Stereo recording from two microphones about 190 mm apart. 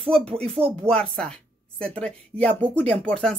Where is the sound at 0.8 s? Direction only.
5° left (ahead or behind).